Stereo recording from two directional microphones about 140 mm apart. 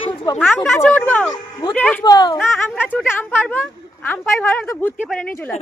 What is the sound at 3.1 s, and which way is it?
Speech, 15° left (ahead or behind).